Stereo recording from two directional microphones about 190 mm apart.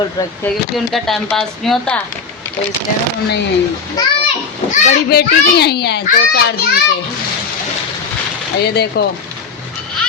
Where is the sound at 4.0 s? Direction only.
20° left (ahead or behind).